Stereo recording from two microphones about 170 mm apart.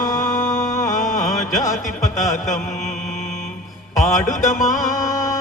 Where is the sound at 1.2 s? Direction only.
20° left (ahead or behind).